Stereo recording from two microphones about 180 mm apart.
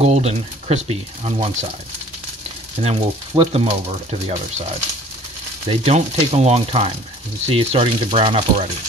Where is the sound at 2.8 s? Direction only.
35° right (ahead or behind).